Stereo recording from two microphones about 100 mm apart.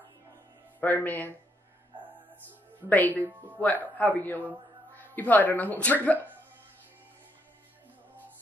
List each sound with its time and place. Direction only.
0.7 s speech: 15° left (ahead or behind)
2.9 s speech: 15° left (ahead or behind)
3.3 s speech: 20° right (ahead or behind)
3.5 s speech: 15° left (ahead or behind)